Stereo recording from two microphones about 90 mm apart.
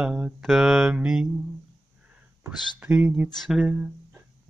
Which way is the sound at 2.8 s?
15° right (ahead or behind).